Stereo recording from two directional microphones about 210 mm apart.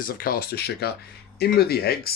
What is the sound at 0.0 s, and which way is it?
Speech, 45° left (ahead or behind).